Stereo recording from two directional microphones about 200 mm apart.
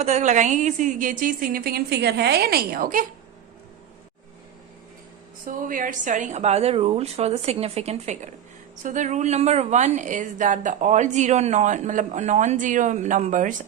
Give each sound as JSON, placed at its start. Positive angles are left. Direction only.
{"t": 0.0, "sound": "a woman's voice", "side_deg": -35}
{"t": 5.5, "sound": "a woman's voice", "side_deg": -45}